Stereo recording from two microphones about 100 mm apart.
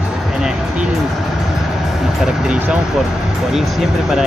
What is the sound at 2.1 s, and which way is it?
Speech, 10° right (ahead or behind).